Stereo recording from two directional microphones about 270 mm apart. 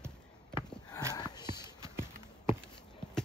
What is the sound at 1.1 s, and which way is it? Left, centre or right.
Sniff, centre.